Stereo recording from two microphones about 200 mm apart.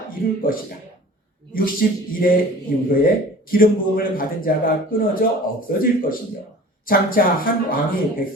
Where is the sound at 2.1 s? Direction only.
45° left (ahead or behind).